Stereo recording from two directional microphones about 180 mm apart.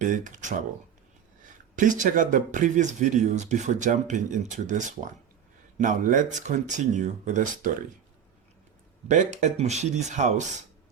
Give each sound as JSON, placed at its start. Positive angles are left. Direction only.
{"t": 0.0, "sound": "speech", "side_deg": -45}
{"t": 1.7, "sound": "speech", "side_deg": -45}
{"t": 9.0, "sound": "speech", "side_deg": -40}